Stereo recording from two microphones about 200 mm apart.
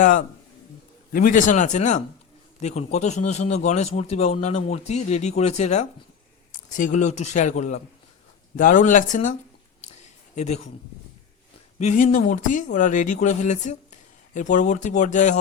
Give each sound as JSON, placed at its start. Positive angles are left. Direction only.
{"t": 0.0, "sound": "speech", "side_deg": 40}
{"t": 9.8, "sound": "a sound", "side_deg": 35}
{"t": 11.8, "sound": "speech", "side_deg": 35}